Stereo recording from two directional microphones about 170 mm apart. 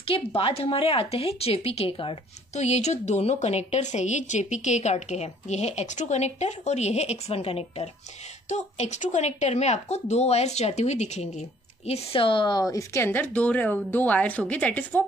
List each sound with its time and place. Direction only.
0.0 s a woman's voice: 35° left (ahead or behind); by 15.0 s 10° left (ahead or behind)